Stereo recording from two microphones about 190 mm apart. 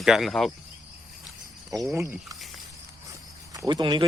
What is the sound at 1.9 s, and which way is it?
Speech, 15° right (ahead or behind).